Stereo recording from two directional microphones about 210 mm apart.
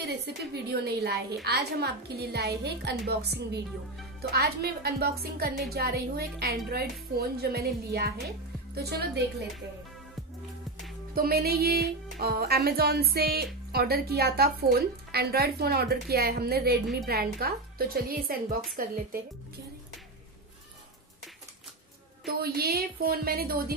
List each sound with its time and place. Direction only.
0.0 s speech: 50° right (ahead or behind)
11.1 s speech: 45° right (ahead or behind)
22.2 s speech: 45° right (ahead or behind)